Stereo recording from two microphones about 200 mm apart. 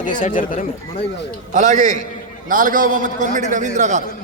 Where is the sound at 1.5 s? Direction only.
35° right (ahead or behind).